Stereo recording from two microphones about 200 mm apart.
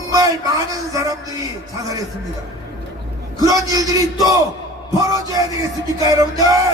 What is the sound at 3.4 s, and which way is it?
Music, 15° right (ahead or behind).